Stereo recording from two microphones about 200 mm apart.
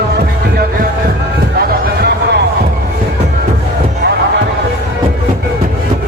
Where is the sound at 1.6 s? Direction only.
55° right (ahead or behind).